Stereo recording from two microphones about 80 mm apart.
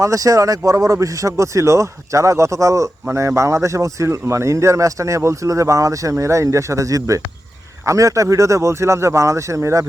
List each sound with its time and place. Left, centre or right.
0.0 s speech: right